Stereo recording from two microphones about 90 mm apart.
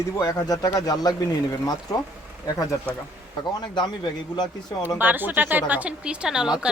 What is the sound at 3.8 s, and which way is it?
Speech, 55° left (ahead or behind).